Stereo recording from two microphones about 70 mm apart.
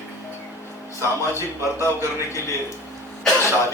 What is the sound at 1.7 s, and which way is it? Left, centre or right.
Speech, left.